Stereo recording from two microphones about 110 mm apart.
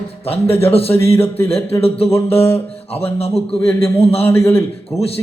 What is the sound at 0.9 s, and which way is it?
Speech, 20° left (ahead or behind).